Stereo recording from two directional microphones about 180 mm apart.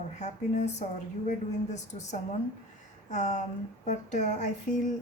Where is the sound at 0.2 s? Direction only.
40° left (ahead or behind).